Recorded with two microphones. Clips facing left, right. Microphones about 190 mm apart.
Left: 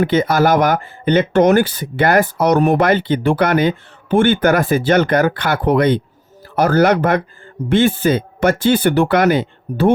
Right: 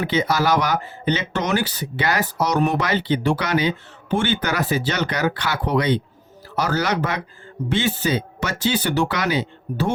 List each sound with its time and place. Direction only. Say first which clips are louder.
0.0 s speech: left 6 dB; 50° left (ahead or behind)